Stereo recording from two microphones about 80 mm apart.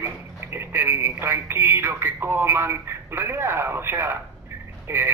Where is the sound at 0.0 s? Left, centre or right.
Right.